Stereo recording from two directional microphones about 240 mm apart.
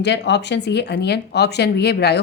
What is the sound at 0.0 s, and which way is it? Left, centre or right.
Speech, left.